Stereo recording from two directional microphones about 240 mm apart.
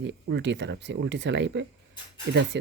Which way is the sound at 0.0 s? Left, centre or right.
Right.